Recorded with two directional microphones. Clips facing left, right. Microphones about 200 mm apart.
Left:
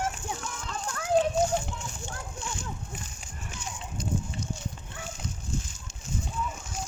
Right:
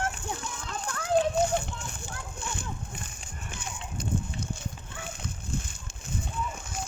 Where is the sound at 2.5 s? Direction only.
55° right (ahead or behind).